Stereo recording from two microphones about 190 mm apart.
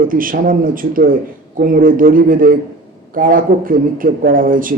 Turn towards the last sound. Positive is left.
turn(degrees=-45)  # may be behind; listen again after turning